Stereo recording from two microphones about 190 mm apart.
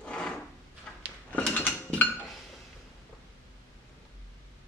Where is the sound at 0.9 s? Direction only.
5° left (ahead or behind).